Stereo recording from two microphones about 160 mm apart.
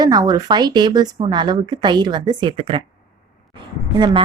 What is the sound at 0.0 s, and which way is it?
A woman's voice, 25° right (ahead or behind).